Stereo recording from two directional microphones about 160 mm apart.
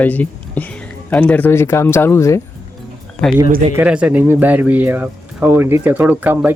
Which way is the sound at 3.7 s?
10° right (ahead or behind).